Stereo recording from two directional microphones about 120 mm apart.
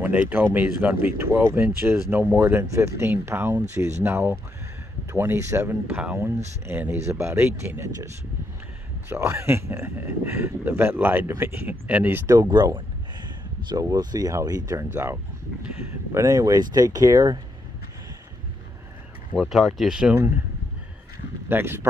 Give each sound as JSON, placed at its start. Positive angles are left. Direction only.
{"t": 0.0, "sound": "speech", "side_deg": -15}
{"t": 9.1, "sound": "speech", "side_deg": -20}
{"t": 12.3, "sound": "speech", "side_deg": -35}
{"t": 14.9, "sound": "speech", "side_deg": -20}
{"t": 19.3, "sound": "speech", "side_deg": 0}
{"t": 21.5, "sound": "speech", "side_deg": -20}